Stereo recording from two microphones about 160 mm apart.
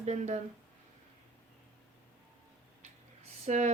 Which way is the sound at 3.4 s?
45° right (ahead or behind).